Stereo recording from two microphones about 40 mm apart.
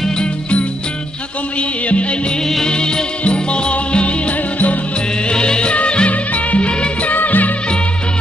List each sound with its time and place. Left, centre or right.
0.2 s music: left
2.6 s music: left
5.3 s music: left
7.2 s music of bollywood: left